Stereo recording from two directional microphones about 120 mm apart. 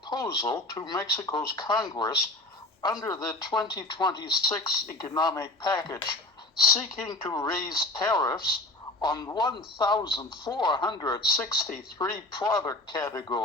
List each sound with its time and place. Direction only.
0.1 s speech: 35° left (ahead or behind)